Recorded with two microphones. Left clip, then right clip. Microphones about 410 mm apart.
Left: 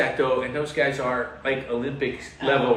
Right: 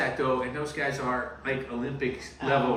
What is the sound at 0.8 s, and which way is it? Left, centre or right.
Speech, centre.